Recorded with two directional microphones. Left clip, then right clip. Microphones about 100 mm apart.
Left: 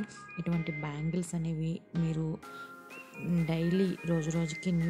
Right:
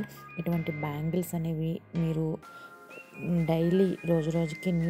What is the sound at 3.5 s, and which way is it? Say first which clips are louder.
Speech: right 7 dB; 35° right (ahead or behind).